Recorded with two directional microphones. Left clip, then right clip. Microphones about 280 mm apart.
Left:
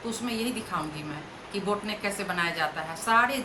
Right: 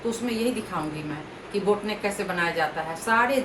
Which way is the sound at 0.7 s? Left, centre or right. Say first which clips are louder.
Right 2 dB; centre.